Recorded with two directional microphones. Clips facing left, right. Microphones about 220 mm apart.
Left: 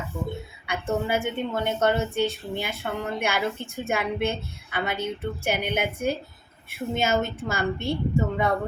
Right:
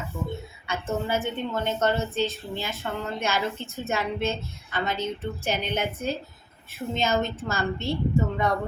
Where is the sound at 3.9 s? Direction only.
15° left (ahead or behind).